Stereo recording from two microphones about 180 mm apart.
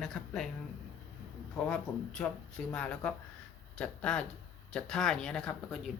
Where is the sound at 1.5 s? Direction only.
5° left (ahead or behind).